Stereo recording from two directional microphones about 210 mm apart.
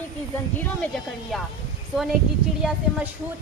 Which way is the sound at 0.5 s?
10° left (ahead or behind).